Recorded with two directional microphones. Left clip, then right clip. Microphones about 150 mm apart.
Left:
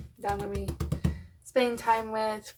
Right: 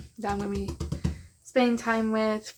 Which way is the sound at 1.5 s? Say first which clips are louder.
Even; 45° right (ahead or behind).